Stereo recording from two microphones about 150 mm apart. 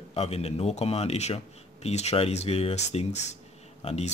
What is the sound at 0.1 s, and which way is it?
Speech, 40° left (ahead or behind).